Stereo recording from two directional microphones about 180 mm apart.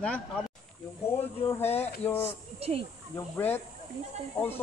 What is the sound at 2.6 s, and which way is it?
Speech, 35° right (ahead or behind).